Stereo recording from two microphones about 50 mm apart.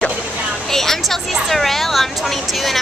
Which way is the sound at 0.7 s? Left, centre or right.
Centre.